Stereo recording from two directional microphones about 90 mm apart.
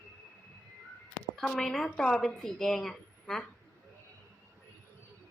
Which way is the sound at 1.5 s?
5° left (ahead or behind).